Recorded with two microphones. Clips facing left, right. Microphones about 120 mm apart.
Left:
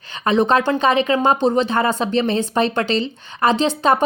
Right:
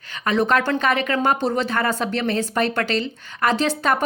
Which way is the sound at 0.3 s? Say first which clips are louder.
Left 3 dB; 25° left (ahead or behind).